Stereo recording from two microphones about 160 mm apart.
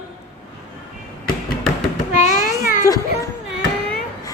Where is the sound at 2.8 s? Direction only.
20° left (ahead or behind).